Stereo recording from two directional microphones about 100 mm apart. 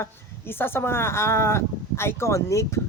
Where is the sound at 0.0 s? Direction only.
25° left (ahead or behind).